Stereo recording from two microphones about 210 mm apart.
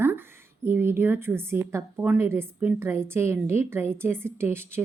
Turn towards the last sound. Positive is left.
turn(degrees=-10)  # may be behind; listen again after turning